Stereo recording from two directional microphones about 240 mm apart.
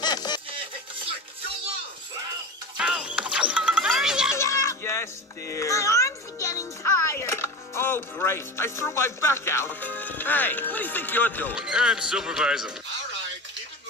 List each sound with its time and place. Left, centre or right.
0.0 s music: centre
2.8 s music: centre
4.4 s music: centre
11.5 s speech: centre